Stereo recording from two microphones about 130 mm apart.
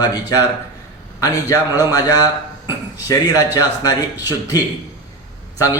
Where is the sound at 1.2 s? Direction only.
25° left (ahead or behind).